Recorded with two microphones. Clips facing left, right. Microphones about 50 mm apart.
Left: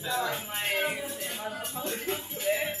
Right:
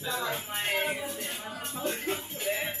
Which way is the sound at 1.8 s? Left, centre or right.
Right.